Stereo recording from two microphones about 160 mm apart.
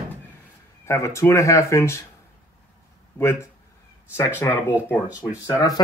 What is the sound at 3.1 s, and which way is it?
Speech, 10° left (ahead or behind).